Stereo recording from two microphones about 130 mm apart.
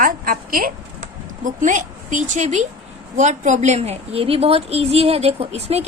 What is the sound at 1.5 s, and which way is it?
A woman's voice, 75° right (ahead or behind).